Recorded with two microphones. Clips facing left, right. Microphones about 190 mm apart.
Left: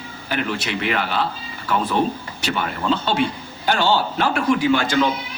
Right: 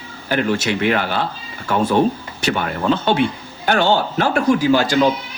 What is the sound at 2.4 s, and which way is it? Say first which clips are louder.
Speech: right 3 dB; 50° right (ahead or behind).